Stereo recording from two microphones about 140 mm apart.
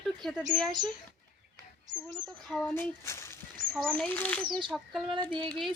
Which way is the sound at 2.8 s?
20° left (ahead or behind).